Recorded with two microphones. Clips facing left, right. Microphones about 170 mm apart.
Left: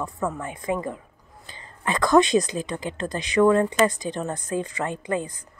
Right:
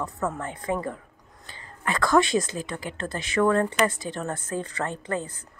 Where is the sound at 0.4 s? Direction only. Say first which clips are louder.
Left 1 dB; 10° left (ahead or behind).